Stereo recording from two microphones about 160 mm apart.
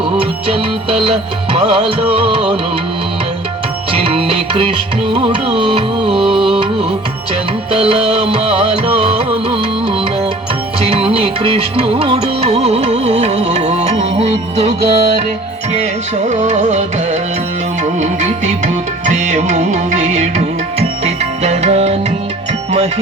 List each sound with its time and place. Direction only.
0.2 s music: 35° right (ahead or behind)
3.9 s music: 35° right (ahead or behind)
7.7 s music: 40° right (ahead or behind)
10.8 s music: 40° right (ahead or behind)